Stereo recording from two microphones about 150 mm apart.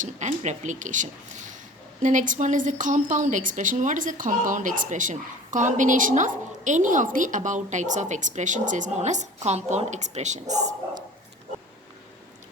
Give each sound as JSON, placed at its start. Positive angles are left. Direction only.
{"t": 0.0, "sound": "a woman's voice", "side_deg": -50}